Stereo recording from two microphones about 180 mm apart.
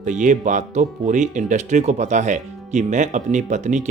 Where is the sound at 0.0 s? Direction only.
45° right (ahead or behind).